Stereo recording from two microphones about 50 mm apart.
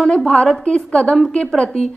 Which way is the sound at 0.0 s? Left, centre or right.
Centre.